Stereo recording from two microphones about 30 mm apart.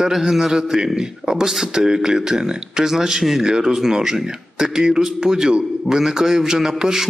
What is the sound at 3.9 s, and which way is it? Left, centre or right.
Speech, centre.